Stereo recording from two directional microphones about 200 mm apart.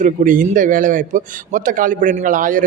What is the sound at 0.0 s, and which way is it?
A man's voice, 40° right (ahead or behind).